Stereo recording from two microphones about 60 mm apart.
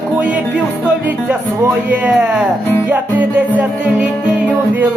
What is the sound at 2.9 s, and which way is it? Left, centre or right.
Music, right.